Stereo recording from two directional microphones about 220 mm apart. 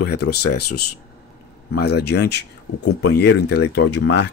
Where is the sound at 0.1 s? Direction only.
45° left (ahead or behind).